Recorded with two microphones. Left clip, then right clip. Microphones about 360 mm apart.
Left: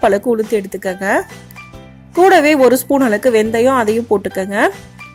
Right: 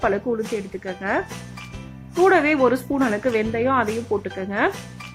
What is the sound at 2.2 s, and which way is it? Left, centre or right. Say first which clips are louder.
A woman's voice: left 8 dB; centre.